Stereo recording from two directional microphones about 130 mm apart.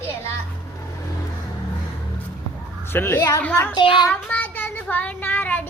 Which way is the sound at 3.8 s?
35° left (ahead or behind).